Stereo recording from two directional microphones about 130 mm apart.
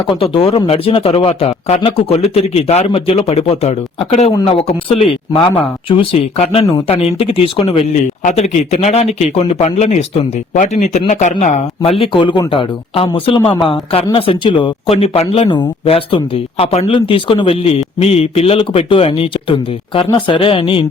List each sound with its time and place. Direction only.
0.2 s speech: 45° left (ahead or behind)
8.2 s speech: 65° left (ahead or behind)
11.8 s speech: 45° left (ahead or behind)